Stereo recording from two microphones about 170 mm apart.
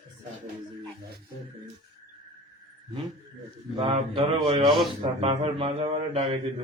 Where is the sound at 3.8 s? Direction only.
35° right (ahead or behind).